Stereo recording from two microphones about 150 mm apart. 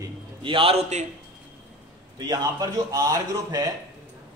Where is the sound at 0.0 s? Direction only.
35° right (ahead or behind).